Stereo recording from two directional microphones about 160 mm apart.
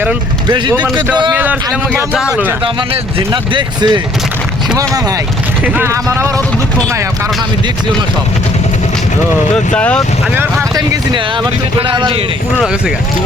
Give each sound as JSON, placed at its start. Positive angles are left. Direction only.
{"t": 0.4, "sound": "speech", "side_deg": -30}
{"t": 1.3, "sound": "speech", "side_deg": -10}
{"t": 2.9, "sound": "speech", "side_deg": -30}
{"t": 5.6, "sound": "speech", "side_deg": -15}
{"t": 9.7, "sound": "speech", "side_deg": 5}
{"t": 10.3, "sound": "speech", "side_deg": -15}
{"t": 11.1, "sound": "speech", "side_deg": -30}